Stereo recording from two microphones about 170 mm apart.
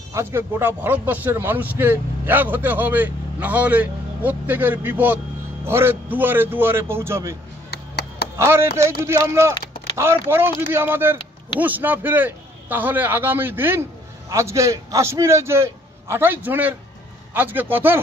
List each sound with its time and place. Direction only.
0.1 s speech: 15° right (ahead or behind)
7.7 s a sound: 70° left (ahead or behind)
8.4 s speech: 15° right (ahead or behind)